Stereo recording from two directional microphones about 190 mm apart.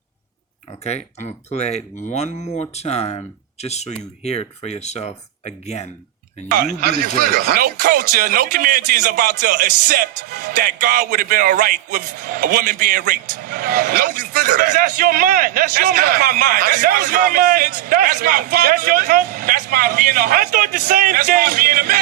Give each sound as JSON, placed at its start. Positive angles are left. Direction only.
{"t": 0.9, "sound": "speech", "side_deg": 35}
{"t": 6.5, "sound": "speech", "side_deg": -50}